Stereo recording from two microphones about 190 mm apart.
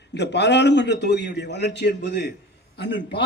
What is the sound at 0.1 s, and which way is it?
A man's voice, 65° left (ahead or behind).